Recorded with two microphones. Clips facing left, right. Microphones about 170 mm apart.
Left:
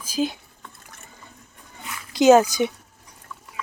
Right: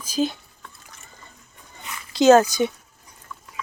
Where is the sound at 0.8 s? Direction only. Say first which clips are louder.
Left 1 dB; 55° left (ahead or behind).